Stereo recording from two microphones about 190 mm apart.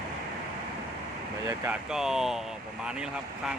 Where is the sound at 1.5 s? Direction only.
10° right (ahead or behind).